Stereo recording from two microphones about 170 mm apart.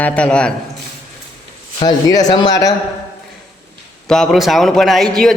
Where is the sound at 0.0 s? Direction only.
5° left (ahead or behind).